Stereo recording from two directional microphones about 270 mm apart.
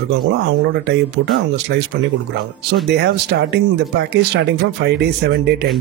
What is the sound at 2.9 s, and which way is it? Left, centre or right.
Speech, right.